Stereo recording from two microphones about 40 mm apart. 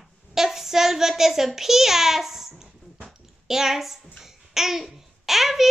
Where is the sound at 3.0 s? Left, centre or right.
Centre.